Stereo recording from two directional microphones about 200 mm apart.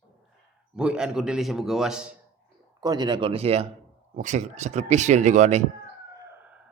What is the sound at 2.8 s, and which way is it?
Speech, 20° right (ahead or behind).